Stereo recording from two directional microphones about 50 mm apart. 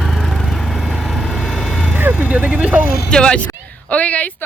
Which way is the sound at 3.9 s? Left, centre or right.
Left.